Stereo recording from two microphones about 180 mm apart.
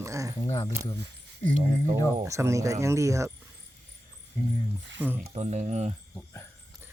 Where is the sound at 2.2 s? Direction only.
15° right (ahead or behind).